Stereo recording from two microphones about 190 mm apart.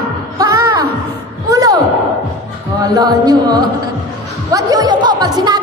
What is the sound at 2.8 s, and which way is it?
A man's voice, 20° right (ahead or behind).